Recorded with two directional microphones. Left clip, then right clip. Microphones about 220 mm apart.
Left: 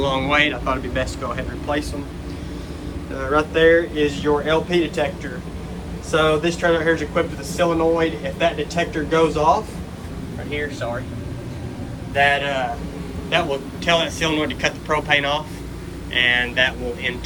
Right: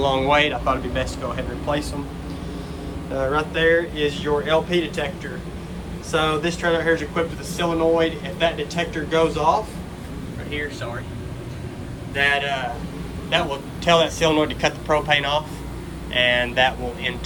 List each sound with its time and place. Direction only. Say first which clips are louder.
0.0 s a man's voice: even; 15° right (ahead or behind)
3.2 s speech: left 3 dB; 5° right (ahead or behind)
12.1 s speech: left 3 dB; centre (ahead or behind)
13.3 s a man's voice: left 2 dB; 15° right (ahead or behind)